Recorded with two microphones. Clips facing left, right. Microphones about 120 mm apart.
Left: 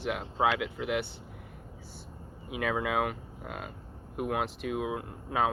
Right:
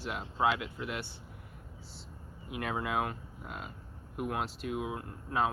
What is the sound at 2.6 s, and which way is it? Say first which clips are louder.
Speech: left 4 dB; 90° left.